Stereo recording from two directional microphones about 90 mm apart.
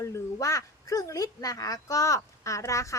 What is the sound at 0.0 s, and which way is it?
Speech, 35° left (ahead or behind).